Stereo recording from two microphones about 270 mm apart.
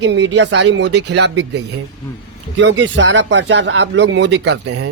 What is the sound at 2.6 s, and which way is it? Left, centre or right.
Speech, right.